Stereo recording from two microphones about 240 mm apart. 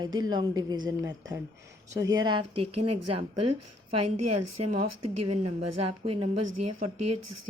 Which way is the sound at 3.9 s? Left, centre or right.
Right.